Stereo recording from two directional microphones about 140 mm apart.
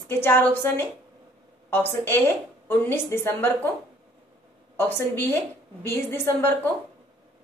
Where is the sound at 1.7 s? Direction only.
15° left (ahead or behind).